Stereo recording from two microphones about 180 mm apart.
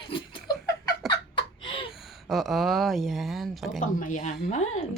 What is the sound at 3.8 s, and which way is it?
Speech, 45° left (ahead or behind).